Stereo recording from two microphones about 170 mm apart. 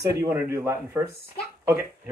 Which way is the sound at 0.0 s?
20° right (ahead or behind).